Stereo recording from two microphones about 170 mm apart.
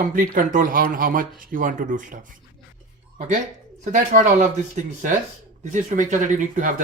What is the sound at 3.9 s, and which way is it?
Speech, 45° right (ahead or behind).